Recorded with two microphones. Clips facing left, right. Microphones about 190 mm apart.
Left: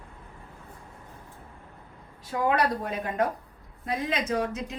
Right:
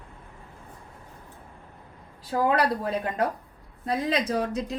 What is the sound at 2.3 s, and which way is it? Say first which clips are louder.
Speech: right 2 dB; 35° right (ahead or behind).